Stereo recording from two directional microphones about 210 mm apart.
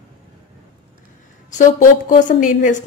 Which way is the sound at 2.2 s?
40° left (ahead or behind).